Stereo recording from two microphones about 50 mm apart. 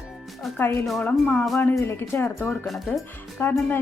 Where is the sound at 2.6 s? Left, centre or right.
Centre.